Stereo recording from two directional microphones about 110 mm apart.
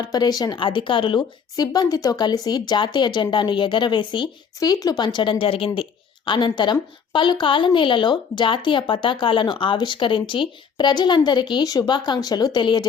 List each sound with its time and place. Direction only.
0.0 s speech: 35° left (ahead or behind)
1.5 s speech: 35° left (ahead or behind)